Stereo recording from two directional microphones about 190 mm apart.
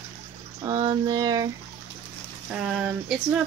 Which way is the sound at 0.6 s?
20° right (ahead or behind).